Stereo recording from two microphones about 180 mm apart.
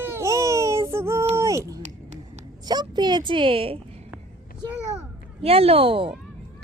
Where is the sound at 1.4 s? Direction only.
15° right (ahead or behind).